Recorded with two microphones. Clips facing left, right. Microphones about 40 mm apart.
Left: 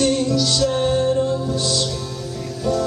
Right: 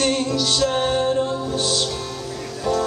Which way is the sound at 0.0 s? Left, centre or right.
Right.